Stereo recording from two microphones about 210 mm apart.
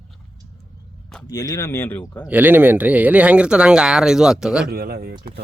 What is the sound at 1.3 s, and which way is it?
Speech, 15° left (ahead or behind).